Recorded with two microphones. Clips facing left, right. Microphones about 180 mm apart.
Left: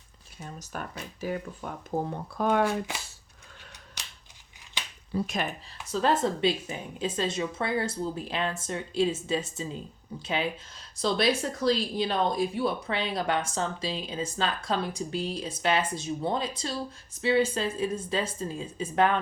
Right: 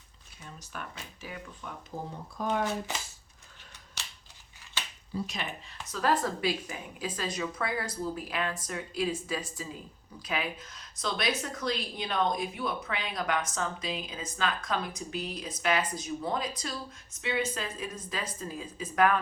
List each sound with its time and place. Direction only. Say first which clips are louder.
0.3 s speech: left 5 dB; 45° left (ahead or behind)
2.0 s speech: left 3 dB; 65° left (ahead or behind)
5.1 s speech: left 6 dB; 50° left (ahead or behind)
5.9 s speech: left 3 dB; 25° left (ahead or behind)